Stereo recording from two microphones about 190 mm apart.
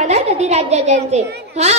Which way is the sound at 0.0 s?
35° right (ahead or behind).